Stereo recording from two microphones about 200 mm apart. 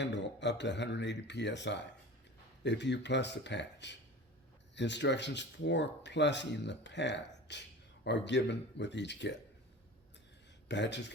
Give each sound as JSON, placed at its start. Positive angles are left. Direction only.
{"t": 0.0, "sound": "speech", "side_deg": 60}
{"t": 10.7, "sound": "speech", "side_deg": 60}